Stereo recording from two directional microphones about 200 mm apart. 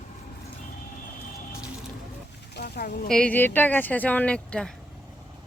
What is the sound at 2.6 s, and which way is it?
Speech, 50° left (ahead or behind).